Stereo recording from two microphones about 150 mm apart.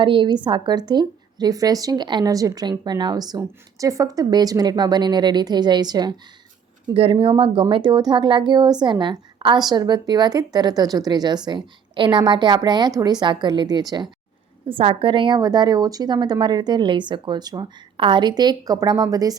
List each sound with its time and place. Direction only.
0.0 s speech: 35° right (ahead or behind)
6.8 s speech: 40° right (ahead or behind)